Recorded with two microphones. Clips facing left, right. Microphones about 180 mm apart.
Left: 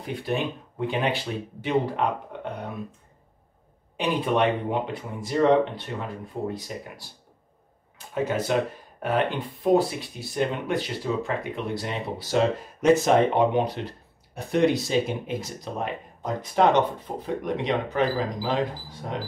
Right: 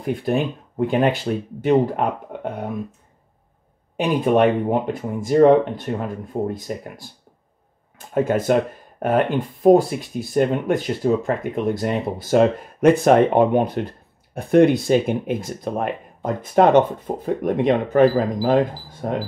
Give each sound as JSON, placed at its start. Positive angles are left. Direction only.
{"t": 0.0, "sound": "speech", "side_deg": -50}
{"t": 3.9, "sound": "speech", "side_deg": -45}
{"t": 8.1, "sound": "speech", "side_deg": -50}